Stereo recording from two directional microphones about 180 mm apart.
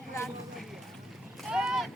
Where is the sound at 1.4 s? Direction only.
5° right (ahead or behind).